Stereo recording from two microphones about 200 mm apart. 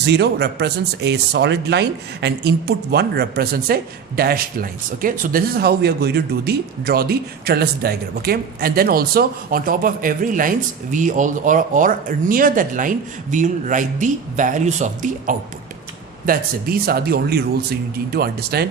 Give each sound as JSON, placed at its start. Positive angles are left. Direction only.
{"t": 0.0, "sound": "speech", "side_deg": -55}